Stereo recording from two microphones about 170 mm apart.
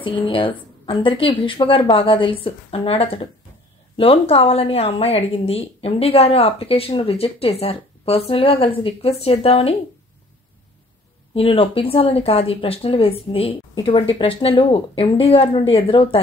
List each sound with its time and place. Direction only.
0.0 s a woman's voice: 30° left (ahead or behind)
11.3 s a woman's voice: 35° left (ahead or behind)